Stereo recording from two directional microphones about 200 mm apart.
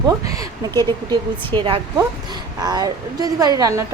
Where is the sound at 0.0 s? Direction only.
20° right (ahead or behind).